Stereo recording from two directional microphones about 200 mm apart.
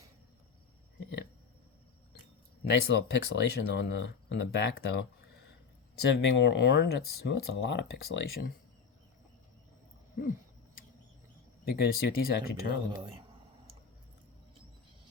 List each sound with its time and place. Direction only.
2.6 s speech: 60° left (ahead or behind)
11.8 s speech: 50° left (ahead or behind)
13.0 s speech: 25° right (ahead or behind)